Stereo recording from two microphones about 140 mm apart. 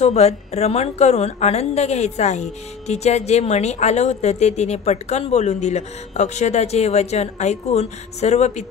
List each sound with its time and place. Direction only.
0.0 s a woman's voice: 50° left (ahead or behind)